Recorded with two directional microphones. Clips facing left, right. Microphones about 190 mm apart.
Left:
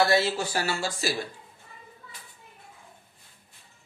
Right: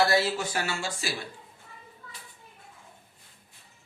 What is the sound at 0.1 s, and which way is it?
Speech, 25° left (ahead or behind).